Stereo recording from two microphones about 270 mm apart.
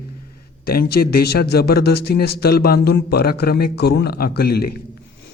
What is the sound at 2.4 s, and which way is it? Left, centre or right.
A man's voice, left.